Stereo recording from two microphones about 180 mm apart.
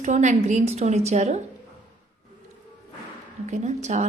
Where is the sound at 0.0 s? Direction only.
40° right (ahead or behind).